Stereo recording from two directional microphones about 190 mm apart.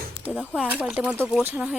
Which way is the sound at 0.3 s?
5° left (ahead or behind).